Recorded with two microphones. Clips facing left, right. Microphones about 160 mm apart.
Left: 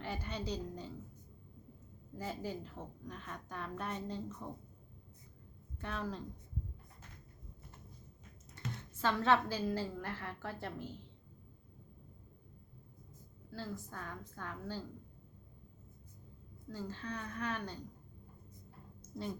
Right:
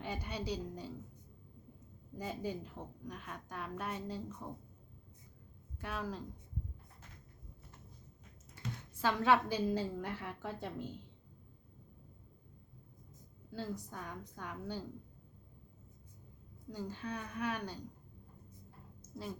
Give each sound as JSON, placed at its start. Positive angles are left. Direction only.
{"t": 0.0, "sound": "a woman's voice", "side_deg": -15}
{"t": 2.1, "sound": "a woman's voice", "side_deg": -15}
{"t": 5.8, "sound": "a woman's voice", "side_deg": -10}
{"t": 8.6, "sound": "computer keyboard", "side_deg": -10}
{"t": 9.0, "sound": "a woman's voice", "side_deg": -10}
{"t": 13.5, "sound": "a woman's voice", "side_deg": -15}
{"t": 16.6, "sound": "a woman's voice", "side_deg": -15}
{"t": 19.1, "sound": "a woman's voice", "side_deg": -5}